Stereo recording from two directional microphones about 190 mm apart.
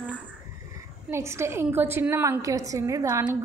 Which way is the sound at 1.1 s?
15° right (ahead or behind).